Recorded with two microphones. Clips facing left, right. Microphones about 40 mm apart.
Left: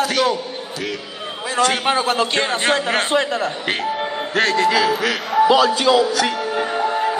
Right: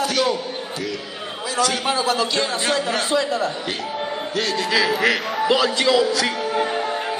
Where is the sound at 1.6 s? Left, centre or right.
Left.